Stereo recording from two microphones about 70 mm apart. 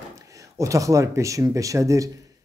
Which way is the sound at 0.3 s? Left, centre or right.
Right.